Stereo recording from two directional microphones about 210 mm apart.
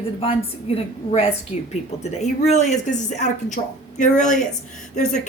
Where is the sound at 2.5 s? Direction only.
35° left (ahead or behind).